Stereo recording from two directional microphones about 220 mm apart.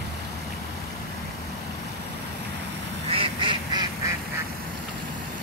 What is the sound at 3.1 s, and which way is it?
Duck, 25° right (ahead or behind).